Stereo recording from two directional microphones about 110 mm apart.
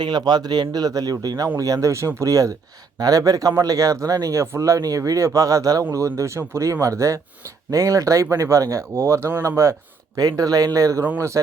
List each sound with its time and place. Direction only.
0.0 s speech: 40° right (ahead or behind)